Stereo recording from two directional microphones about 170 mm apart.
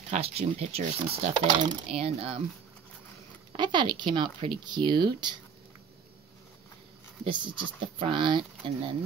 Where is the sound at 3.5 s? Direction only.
30° right (ahead or behind).